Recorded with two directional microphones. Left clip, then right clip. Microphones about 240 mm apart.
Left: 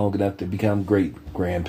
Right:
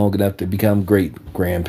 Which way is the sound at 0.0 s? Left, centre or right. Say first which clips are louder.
Right 4 dB; right.